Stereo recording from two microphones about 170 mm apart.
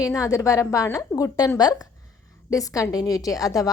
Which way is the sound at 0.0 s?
20° left (ahead or behind).